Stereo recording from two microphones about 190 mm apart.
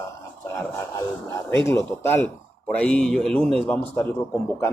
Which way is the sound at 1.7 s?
15° left (ahead or behind).